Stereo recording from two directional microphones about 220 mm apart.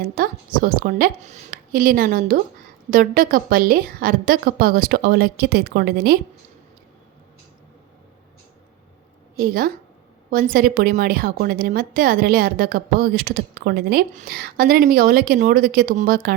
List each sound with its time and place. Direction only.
0.0 s a woman's voice: 40° right (ahead or behind)
9.4 s a woman's voice: 40° right (ahead or behind)